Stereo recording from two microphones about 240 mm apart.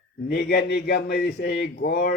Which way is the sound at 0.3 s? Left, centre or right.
Left.